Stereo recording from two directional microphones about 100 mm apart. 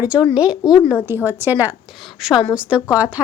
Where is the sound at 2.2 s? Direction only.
Centre (ahead or behind).